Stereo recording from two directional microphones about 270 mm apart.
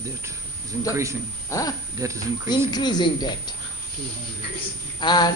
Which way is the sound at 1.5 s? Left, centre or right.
Centre.